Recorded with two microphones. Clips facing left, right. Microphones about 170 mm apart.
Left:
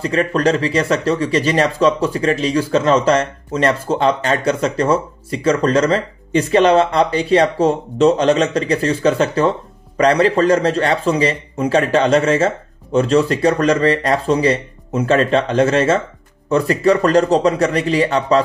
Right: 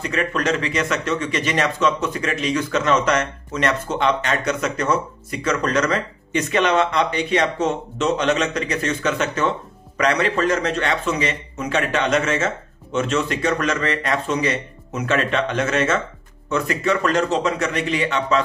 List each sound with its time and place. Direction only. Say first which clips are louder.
0.0 s speech: left 6 dB; 35° left (ahead or behind)